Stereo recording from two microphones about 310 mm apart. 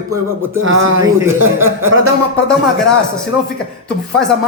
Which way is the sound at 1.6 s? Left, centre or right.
Centre.